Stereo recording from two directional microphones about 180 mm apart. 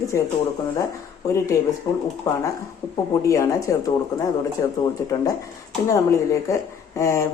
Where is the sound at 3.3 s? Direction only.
20° left (ahead or behind).